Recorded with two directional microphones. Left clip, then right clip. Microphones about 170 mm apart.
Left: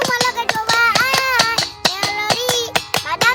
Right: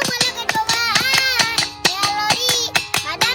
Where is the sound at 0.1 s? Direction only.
40° left (ahead or behind).